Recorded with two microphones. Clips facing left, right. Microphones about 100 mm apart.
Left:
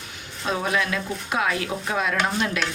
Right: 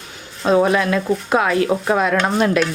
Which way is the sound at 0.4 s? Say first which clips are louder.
Right 10 dB; 40° right (ahead or behind).